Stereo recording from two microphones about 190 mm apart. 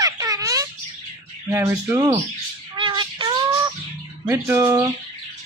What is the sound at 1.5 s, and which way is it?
Speech, 15° right (ahead or behind).